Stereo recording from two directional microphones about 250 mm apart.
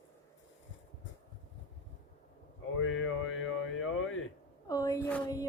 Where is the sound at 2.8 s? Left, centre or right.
Left.